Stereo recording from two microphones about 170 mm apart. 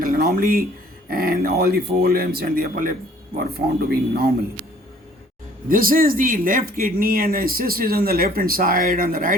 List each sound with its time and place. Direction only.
0.0 s a sound: 60° right (ahead or behind)
1.1 s speech: 60° right (ahead or behind)
3.3 s speech: 65° right (ahead or behind)
5.6 s speech: 55° right (ahead or behind)